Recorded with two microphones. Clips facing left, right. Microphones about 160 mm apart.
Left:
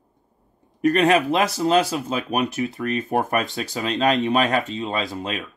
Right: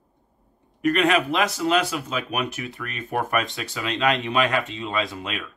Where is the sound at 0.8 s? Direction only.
35° left (ahead or behind).